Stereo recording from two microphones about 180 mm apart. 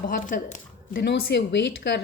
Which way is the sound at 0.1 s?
45° left (ahead or behind).